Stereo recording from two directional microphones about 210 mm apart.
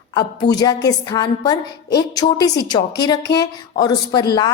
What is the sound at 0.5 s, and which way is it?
A woman's voice, 20° left (ahead or behind).